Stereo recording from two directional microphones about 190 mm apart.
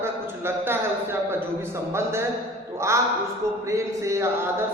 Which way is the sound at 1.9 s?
15° right (ahead or behind).